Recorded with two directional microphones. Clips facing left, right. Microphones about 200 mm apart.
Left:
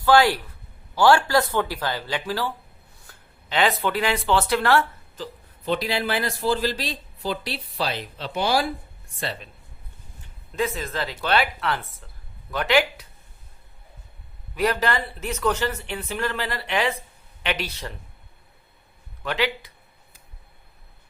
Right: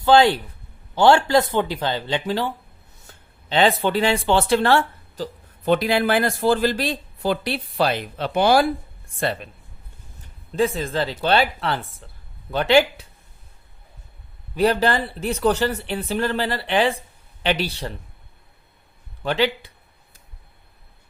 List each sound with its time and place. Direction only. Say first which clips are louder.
0.0 s speech: right 3 dB; 25° right (ahead or behind)
5.6 s speech: right 6 dB; 55° right (ahead or behind)
10.5 s speech: right 5 dB; 30° right (ahead or behind)
14.5 s speech: right 4 dB; 30° right (ahead or behind)
19.2 s speech: right 4 dB; 30° right (ahead or behind)